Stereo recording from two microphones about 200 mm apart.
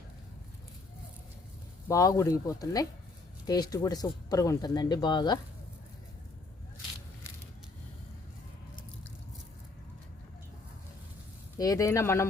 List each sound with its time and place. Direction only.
1.9 s speech: 15° left (ahead or behind)
11.5 s speech: 15° left (ahead or behind)